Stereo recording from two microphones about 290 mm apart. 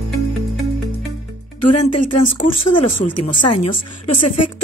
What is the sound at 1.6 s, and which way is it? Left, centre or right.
A woman's voice, left.